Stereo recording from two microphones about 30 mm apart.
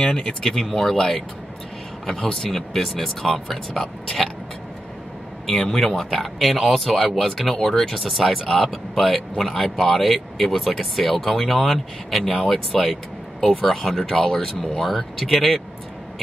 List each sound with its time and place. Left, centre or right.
0.4 s speech: centre
5.5 s speech: centre